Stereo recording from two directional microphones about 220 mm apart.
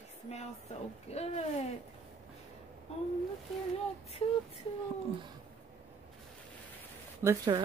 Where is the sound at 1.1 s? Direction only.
30° left (ahead or behind).